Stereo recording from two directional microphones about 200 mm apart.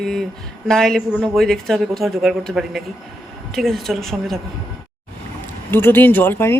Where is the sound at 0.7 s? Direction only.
Centre (ahead or behind).